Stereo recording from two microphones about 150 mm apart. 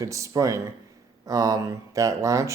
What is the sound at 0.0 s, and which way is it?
Speech, 20° right (ahead or behind).